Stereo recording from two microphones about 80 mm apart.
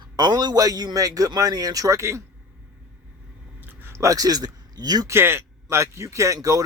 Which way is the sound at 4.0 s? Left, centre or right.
Right.